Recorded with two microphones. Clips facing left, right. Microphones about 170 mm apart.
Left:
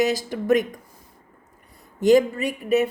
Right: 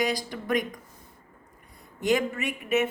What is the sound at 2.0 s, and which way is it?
Speech, 35° left (ahead or behind).